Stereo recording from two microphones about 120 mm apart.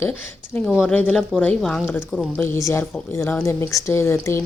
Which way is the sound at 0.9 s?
10° left (ahead or behind).